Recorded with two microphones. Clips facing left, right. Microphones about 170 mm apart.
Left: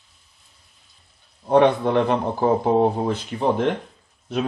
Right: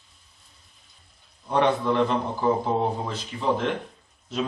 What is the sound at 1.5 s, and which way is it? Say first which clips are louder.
Speech: left 6 dB; 60° left (ahead or behind).